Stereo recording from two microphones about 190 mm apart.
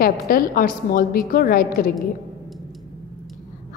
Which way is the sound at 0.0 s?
50° left (ahead or behind).